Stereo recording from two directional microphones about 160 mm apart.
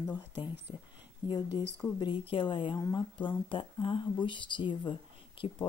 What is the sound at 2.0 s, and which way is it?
A woman's voice, 30° left (ahead or behind).